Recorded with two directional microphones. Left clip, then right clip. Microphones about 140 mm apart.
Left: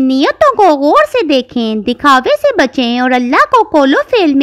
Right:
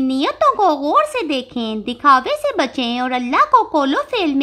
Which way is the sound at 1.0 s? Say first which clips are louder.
Left 8 dB; 50° left (ahead or behind).